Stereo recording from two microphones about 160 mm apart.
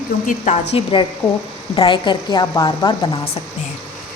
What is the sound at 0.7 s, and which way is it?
A woman's voice, 35° left (ahead or behind).